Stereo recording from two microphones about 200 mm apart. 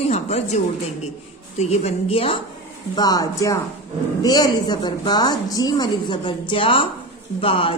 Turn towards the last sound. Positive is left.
turn(degrees=25)  # may be behind; listen again after turning